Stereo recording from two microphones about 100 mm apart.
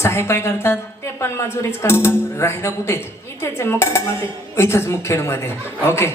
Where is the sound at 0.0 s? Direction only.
25° left (ahead or behind).